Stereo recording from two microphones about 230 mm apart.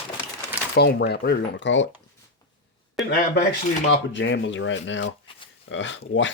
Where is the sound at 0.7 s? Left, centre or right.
Left.